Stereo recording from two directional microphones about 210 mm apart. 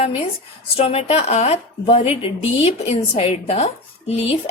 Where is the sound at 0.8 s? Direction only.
30° left (ahead or behind).